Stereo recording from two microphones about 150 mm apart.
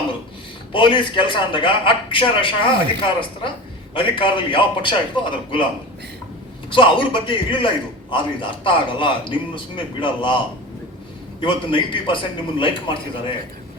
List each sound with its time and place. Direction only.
0.7 s a man's voice: 35° left (ahead or behind)
6.7 s a man's voice: 35° left (ahead or behind)